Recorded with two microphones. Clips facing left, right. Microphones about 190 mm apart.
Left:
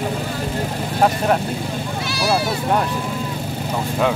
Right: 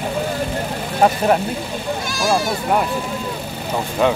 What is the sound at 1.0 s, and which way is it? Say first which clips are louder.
Speech: right 2 dB; 5° right (ahead or behind).